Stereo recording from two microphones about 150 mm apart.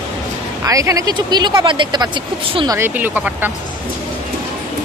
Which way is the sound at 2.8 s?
10° right (ahead or behind).